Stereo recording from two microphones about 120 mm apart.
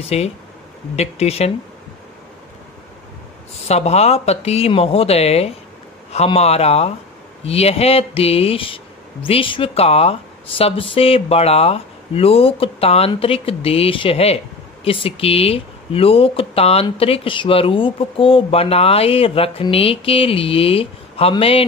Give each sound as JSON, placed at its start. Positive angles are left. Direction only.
{"t": 0.0, "sound": "speech", "side_deg": 60}
{"t": 3.6, "sound": "speech", "side_deg": 60}